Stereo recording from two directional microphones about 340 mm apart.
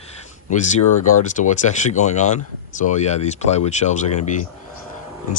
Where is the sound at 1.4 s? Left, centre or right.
Left.